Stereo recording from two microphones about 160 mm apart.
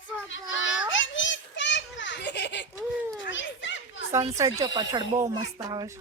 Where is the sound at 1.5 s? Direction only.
90° left.